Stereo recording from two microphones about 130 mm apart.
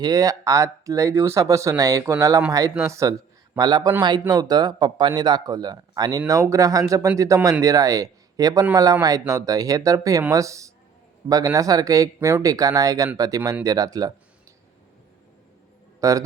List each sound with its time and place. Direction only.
0.0 s speech: 25° right (ahead or behind)
16.0 s a man's voice: 25° right (ahead or behind)